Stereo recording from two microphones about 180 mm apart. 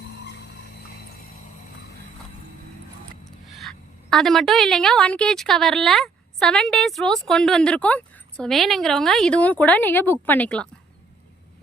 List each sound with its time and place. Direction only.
3.2 s a woman's voice: centre (ahead or behind)